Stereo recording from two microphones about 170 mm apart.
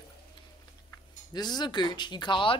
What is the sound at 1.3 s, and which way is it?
A man's voice, 25° left (ahead or behind).